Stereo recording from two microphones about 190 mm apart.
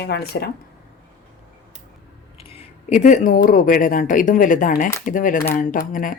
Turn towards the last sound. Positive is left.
turn(degrees=45)  # may be behind; listen again after turning